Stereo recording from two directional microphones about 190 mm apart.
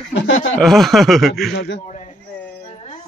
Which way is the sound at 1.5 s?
65° left (ahead or behind).